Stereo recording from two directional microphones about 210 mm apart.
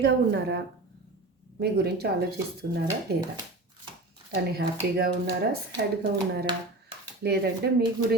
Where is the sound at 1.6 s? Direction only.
50° right (ahead or behind).